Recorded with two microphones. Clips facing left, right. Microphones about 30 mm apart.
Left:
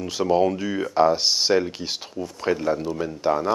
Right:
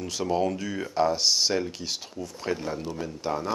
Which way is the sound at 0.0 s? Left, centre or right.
Centre.